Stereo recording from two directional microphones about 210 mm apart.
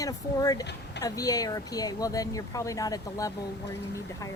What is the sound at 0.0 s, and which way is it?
A woman's voice, 15° left (ahead or behind).